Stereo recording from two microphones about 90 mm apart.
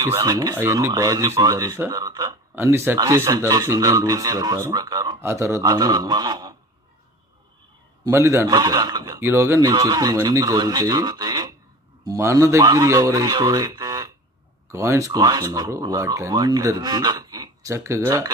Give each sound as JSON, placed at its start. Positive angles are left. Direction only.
{"t": 0.0, "sound": "speech", "side_deg": -35}
{"t": 0.6, "sound": "speech", "side_deg": -35}
{"t": 1.9, "sound": "a sound", "side_deg": -45}
{"t": 2.5, "sound": "speech", "side_deg": -30}
{"t": 5.2, "sound": "speech", "side_deg": -30}
{"t": 5.6, "sound": "speech", "side_deg": -45}
{"t": 8.1, "sound": "speech", "side_deg": -35}
{"t": 8.5, "sound": "speech", "side_deg": -45}
{"t": 9.2, "sound": "speech", "side_deg": -30}
{"t": 12.2, "sound": "speech", "side_deg": -30}
{"t": 14.7, "sound": "speech", "side_deg": -35}
{"t": 17.6, "sound": "speech", "side_deg": -35}